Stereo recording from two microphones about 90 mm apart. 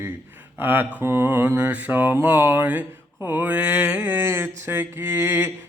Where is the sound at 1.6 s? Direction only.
20° right (ahead or behind).